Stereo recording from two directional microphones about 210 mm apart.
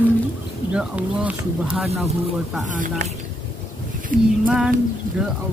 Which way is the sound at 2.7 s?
35° right (ahead or behind).